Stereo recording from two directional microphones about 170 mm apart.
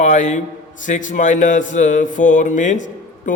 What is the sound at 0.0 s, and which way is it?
A man's voice, 45° left (ahead or behind).